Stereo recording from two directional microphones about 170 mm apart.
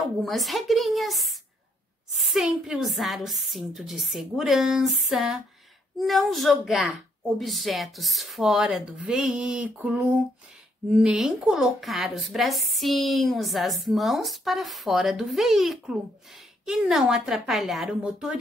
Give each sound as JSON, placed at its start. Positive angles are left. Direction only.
{"t": 0.0, "sound": "speech", "side_deg": 0}